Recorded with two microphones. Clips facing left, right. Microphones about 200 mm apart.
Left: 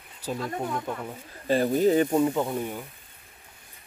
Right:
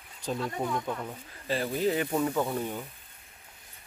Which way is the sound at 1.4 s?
45° left (ahead or behind).